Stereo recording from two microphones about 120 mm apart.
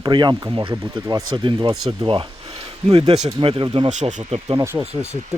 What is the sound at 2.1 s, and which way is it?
Speech, 50° right (ahead or behind).